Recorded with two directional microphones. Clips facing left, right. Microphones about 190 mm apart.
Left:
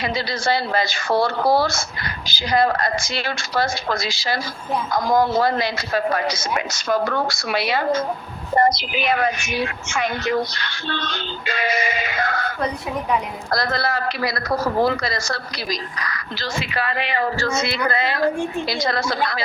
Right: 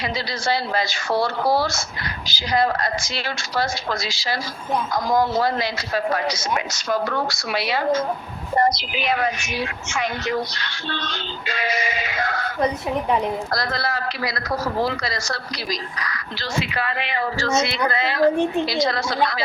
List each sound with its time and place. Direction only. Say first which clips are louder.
0.4 s a woman's voice: left 1 dB; 55° left (ahead or behind)
13.5 s a woman's voice: left 3 dB; 55° left (ahead or behind)